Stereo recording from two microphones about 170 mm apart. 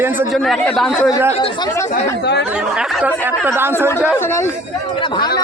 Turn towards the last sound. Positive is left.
turn(degrees=25)  # may be behind; listen again after turning